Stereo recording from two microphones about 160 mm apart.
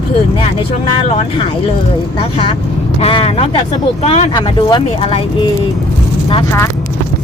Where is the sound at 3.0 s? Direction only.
35° left (ahead or behind).